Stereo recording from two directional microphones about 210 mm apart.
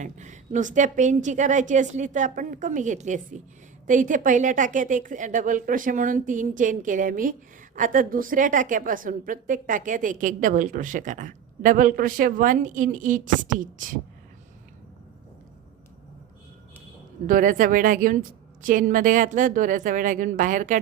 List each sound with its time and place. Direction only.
0.0 s a woman's voice: 35° right (ahead or behind)
17.2 s a woman's voice: 40° right (ahead or behind)